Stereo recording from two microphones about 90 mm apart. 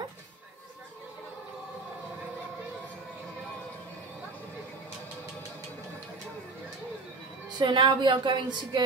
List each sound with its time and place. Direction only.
7.5 s a woman's voice: 60° right (ahead or behind)